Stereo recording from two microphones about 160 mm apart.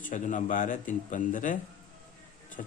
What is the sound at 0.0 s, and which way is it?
A man's voice, 50° left (ahead or behind).